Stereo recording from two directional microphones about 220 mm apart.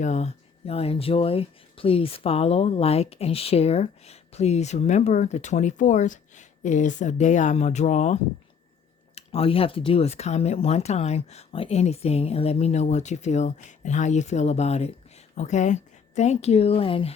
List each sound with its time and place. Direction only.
0.0 s speech: 30° left (ahead or behind)